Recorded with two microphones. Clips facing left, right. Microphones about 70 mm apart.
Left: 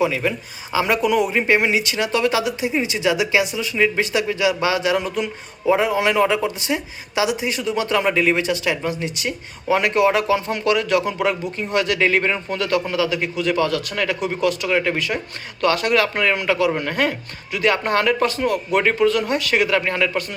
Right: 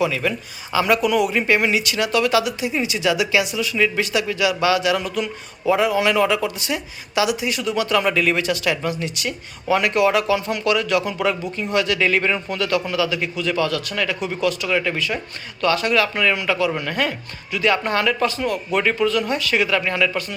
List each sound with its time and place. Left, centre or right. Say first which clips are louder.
0.0 s speech: left 1 dB; left